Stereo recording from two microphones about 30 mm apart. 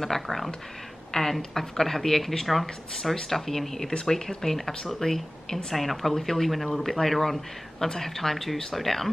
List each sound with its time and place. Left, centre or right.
0.0 s speech: centre
1.1 s speech: left
1.5 s speech: centre